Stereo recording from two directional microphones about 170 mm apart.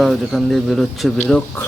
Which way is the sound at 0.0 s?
Centre (ahead or behind).